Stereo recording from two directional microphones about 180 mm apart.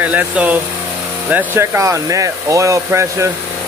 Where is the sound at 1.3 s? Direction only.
10° right (ahead or behind).